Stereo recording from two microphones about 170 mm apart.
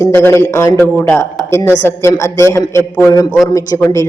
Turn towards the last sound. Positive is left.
turn(degrees=20)  # may be behind; listen again after turning